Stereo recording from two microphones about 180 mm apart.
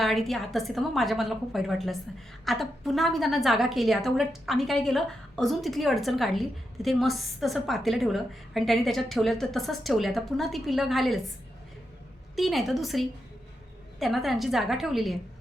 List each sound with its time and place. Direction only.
0.0 s a woman's voice: centre (ahead or behind)
12.4 s a woman's voice: centre (ahead or behind)